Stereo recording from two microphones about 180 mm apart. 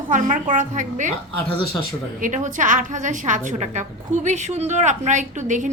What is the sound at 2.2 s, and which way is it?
A woman's voice, 45° right (ahead or behind).